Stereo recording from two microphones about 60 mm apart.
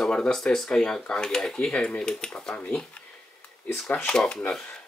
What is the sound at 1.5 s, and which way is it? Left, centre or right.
Cutlery, centre.